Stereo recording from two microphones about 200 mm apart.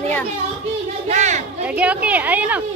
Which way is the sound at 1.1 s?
35° right (ahead or behind).